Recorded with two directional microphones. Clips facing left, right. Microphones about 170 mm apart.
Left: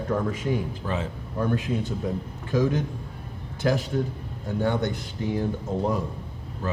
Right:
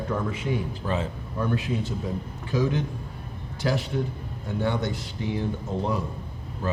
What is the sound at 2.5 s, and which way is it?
Speech, 45° left (ahead or behind).